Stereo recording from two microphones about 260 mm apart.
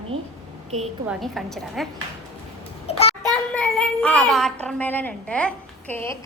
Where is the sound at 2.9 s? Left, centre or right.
Left.